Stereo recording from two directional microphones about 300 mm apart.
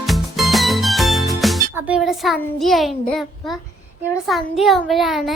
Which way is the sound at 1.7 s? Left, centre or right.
Centre.